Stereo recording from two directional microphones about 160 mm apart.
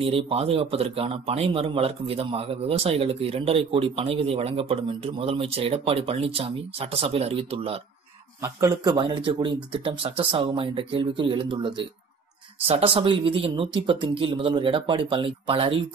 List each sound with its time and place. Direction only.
0.0 s a man's voice: 40° right (ahead or behind)
8.4 s a man's voice: 20° right (ahead or behind); by 15.8 s 35° right (ahead or behind)